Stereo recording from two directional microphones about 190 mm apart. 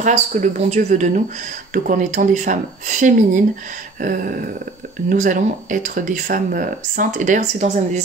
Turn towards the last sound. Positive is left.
turn(degrees=-40)  # may be behind; listen again after turning